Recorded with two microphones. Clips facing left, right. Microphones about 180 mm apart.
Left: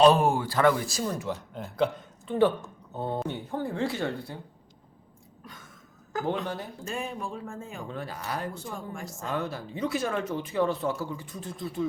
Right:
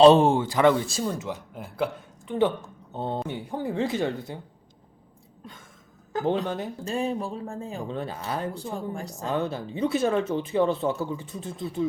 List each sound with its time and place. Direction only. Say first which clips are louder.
0.0 s speech: right 5 dB; 25° right (ahead or behind)
1.3 s speech: left 1 dB; 10° right (ahead or behind)
2.9 s speech: right 1 dB; 25° right (ahead or behind)
3.2 s a woman's voice: right 1 dB; 10° right (ahead or behind)
6.1 s speech: right 4 dB; 25° right (ahead or behind)
6.8 s speech: right 6 dB; 35° right (ahead or behind)